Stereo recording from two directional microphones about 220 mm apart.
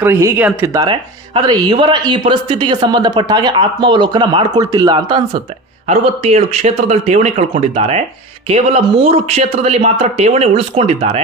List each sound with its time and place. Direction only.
0.0 s speech: 10° right (ahead or behind)
0.8 s speech: 20° right (ahead or behind)